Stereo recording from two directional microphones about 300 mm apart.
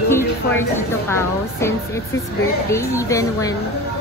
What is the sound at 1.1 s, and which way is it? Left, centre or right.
Speech, centre.